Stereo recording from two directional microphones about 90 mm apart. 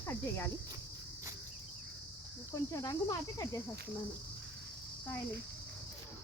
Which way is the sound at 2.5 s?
40° left (ahead or behind).